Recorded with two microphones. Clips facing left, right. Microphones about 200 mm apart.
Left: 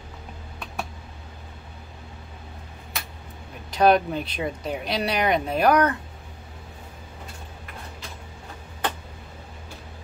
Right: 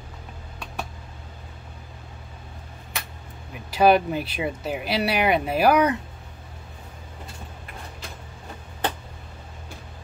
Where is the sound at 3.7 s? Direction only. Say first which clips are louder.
Right 1 dB; 5° right (ahead or behind).